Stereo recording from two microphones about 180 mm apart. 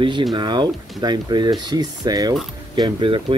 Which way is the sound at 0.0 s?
25° right (ahead or behind).